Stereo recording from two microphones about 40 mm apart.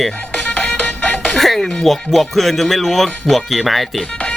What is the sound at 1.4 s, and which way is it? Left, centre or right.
Speech, centre.